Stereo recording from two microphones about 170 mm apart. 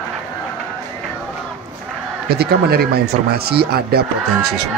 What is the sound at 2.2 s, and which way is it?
Speech, 65° right (ahead or behind).